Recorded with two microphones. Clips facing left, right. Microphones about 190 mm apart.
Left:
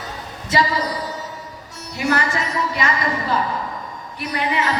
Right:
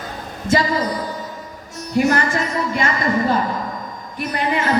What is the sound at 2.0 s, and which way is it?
A woman's voice, 50° right (ahead or behind).